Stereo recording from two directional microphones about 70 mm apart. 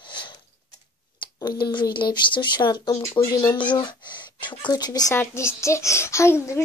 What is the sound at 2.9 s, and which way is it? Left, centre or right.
Speech, left.